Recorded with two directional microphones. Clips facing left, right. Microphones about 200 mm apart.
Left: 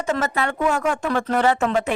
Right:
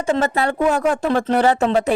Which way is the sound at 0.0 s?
30° right (ahead or behind).